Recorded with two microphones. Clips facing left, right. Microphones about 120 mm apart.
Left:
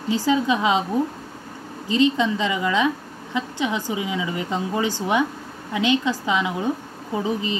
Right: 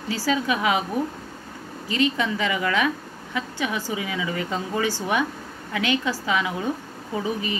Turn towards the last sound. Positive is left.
turn(degrees=20)  # may be behind; listen again after turning